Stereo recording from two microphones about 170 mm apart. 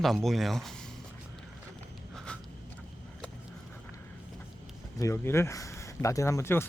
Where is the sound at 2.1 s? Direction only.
5° left (ahead or behind).